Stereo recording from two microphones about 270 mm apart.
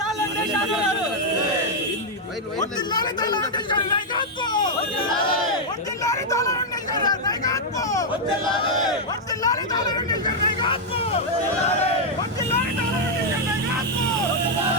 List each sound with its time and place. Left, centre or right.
2.6 s speech: centre
5.0 s crowd: centre
6.0 s hubbub: centre
9.4 s speech: centre